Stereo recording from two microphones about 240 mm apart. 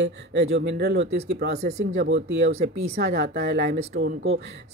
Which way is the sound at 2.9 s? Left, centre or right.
Right.